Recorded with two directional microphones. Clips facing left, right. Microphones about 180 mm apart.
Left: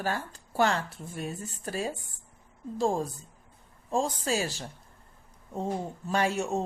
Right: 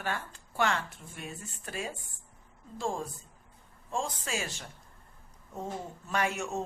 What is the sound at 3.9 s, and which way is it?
Speech, 35° left (ahead or behind).